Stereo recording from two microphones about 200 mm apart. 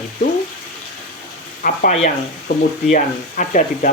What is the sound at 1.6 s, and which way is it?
Speech, 40° left (ahead or behind).